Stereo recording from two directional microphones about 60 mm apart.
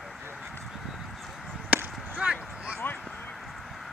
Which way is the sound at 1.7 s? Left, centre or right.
Right.